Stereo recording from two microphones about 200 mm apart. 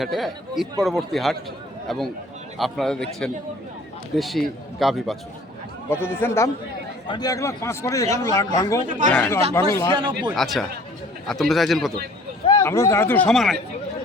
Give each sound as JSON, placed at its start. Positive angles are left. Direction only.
{"t": 0.0, "sound": "speech", "side_deg": 0}
{"t": 5.9, "sound": "a man's voice", "side_deg": 10}
{"t": 9.9, "sound": "speech", "side_deg": -25}
{"t": 10.3, "sound": "speech", "side_deg": 0}
{"t": 12.6, "sound": "a man's voice", "side_deg": 15}